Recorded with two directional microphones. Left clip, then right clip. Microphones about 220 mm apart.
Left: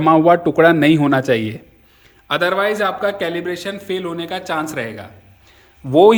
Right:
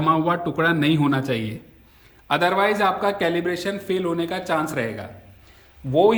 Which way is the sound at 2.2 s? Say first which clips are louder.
Left 2 dB; 5° left (ahead or behind).